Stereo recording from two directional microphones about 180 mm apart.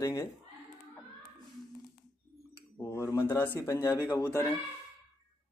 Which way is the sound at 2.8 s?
15° left (ahead or behind).